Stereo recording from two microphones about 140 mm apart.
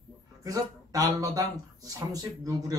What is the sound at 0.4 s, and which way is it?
Speech, 25° right (ahead or behind).